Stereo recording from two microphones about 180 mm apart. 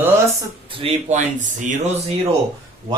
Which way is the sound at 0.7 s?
30° right (ahead or behind).